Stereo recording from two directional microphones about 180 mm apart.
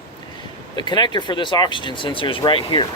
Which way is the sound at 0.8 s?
25° left (ahead or behind).